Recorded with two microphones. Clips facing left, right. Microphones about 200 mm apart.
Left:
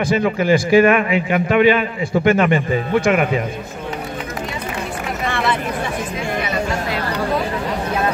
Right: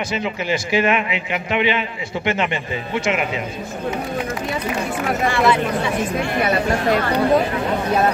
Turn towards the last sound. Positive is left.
turn(degrees=-45)  # may be behind; listen again after turning